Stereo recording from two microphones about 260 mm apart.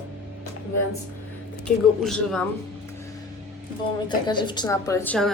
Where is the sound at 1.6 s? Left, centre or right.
Centre.